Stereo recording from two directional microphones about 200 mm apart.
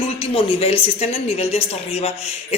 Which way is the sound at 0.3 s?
25° left (ahead or behind).